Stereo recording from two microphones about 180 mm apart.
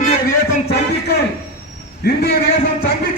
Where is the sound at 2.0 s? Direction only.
60° left (ahead or behind).